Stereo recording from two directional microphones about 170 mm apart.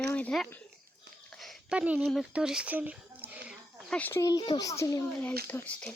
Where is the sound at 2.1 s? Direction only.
Centre (ahead or behind).